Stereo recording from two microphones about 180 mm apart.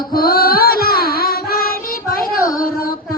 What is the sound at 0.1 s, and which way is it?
Music, 55° left (ahead or behind).